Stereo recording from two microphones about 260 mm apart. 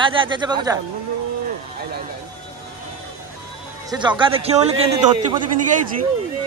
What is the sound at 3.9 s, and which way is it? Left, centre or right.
Speech, centre.